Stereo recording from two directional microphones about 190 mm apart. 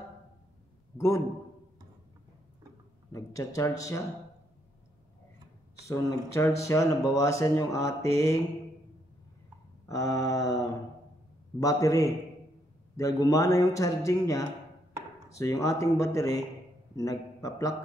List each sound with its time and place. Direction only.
0.9 s speech: 15° left (ahead or behind)
3.1 s speech: 15° left (ahead or behind)
5.9 s speech: 15° left (ahead or behind)
9.8 s speech: 15° left (ahead or behind)
11.6 s a man's voice: 15° left (ahead or behind)